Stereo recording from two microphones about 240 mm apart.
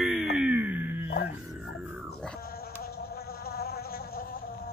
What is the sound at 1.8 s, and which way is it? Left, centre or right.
Music, centre.